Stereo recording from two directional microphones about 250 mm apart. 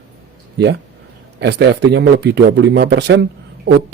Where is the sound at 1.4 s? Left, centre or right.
Right.